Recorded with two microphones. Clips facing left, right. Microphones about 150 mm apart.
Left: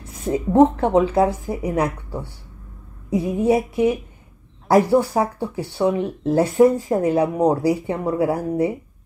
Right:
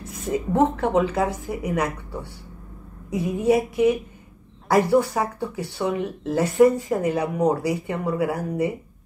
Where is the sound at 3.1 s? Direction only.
25° left (ahead or behind).